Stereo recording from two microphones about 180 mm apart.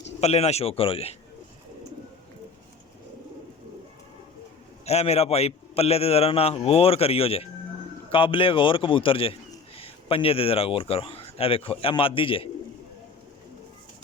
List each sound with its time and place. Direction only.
0.2 s a man's voice: 35° left (ahead or behind)
4.9 s a man's voice: 35° left (ahead or behind)